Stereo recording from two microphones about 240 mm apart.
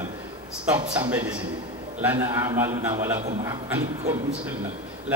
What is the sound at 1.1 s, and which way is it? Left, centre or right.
A man's voice, centre.